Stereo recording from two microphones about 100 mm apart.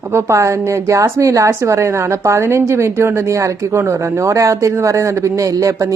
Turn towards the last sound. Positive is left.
turn(degrees=-35)  # may be behind; listen again after turning